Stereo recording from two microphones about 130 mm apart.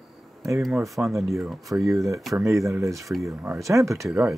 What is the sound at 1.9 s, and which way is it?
Speech, 25° right (ahead or behind).